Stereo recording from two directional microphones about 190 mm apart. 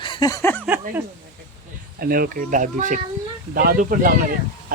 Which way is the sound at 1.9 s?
50° right (ahead or behind).